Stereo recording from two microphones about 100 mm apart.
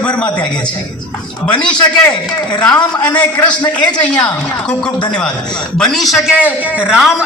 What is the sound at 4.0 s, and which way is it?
A woman's voice, 15° left (ahead or behind).